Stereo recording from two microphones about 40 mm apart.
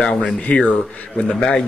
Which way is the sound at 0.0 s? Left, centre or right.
Left.